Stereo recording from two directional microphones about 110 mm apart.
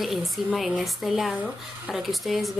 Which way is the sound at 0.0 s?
Centre (ahead or behind).